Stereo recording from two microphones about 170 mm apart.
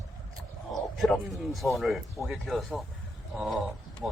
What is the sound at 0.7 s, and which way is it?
A man's voice, centre (ahead or behind).